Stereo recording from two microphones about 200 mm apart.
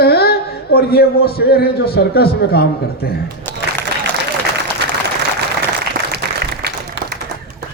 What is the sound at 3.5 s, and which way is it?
Music, 10° left (ahead or behind).